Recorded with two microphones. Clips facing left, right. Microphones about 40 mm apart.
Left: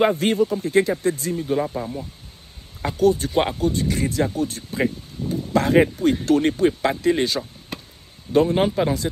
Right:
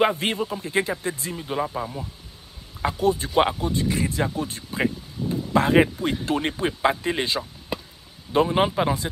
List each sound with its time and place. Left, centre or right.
0.0 s speech: right
1.6 s a man's voice: centre
2.8 s a man's voice: right